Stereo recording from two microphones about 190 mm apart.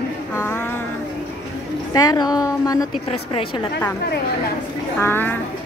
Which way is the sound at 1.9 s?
20° left (ahead or behind).